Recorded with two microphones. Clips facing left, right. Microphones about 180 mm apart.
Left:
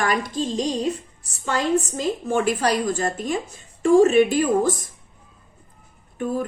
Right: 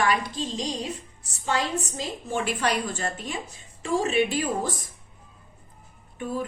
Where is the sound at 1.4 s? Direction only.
50° left (ahead or behind).